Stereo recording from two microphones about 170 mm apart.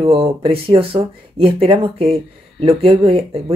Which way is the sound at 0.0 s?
35° right (ahead or behind).